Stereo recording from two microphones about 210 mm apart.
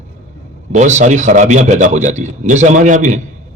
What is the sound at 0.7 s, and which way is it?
A man's voice, 35° right (ahead or behind).